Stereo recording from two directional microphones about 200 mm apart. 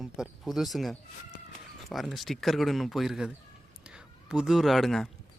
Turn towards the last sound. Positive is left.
turn(degrees=0)  # may be behind; listen again after turning